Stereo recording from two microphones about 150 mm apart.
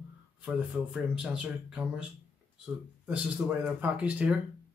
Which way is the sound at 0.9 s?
5° right (ahead or behind).